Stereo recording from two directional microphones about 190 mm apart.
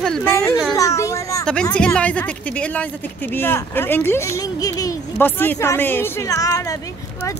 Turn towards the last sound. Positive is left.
turn(degrees=15)  # may be behind; listen again after turning